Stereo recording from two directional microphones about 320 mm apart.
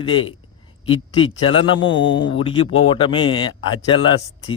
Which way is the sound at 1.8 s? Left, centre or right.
Left.